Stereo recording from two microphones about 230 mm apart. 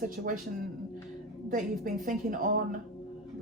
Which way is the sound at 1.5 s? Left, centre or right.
Right.